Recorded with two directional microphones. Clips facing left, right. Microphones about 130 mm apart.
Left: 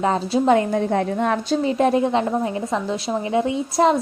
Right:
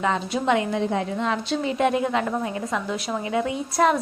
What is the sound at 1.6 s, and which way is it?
A woman's voice, 35° left (ahead or behind).